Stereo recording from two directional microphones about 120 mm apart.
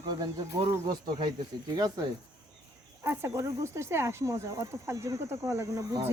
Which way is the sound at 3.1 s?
20° right (ahead or behind).